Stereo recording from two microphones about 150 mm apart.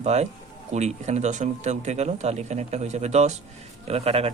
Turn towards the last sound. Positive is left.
turn(degrees=-40)  # may be behind; listen again after turning